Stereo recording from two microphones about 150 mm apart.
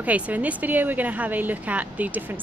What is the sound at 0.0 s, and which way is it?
A woman's voice, 10° right (ahead or behind).